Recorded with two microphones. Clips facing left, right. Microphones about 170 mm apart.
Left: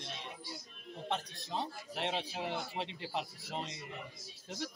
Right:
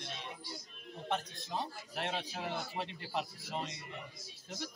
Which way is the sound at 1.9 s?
25° left (ahead or behind).